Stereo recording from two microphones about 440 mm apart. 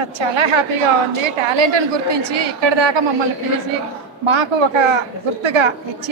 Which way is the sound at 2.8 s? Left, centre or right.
Right.